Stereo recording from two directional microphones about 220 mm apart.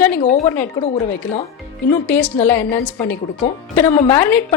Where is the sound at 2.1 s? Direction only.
5° left (ahead or behind).